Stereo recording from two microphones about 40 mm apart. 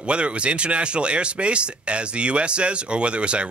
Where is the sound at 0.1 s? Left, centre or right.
Right.